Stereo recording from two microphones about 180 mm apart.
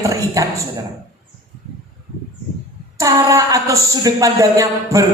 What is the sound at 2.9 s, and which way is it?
A woman's voice, 20° right (ahead or behind).